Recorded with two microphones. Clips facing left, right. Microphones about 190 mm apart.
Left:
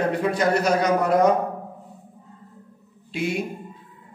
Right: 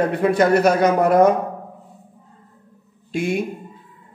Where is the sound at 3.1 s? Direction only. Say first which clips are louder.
Right 3 dB; 45° right (ahead or behind).